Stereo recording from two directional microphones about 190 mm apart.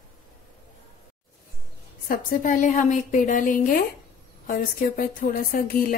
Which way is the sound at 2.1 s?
45° left (ahead or behind).